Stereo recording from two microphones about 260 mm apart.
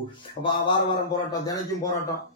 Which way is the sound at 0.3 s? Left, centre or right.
Centre.